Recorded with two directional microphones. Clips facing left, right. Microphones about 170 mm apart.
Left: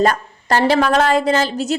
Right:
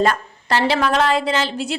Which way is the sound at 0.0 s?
45° left (ahead or behind).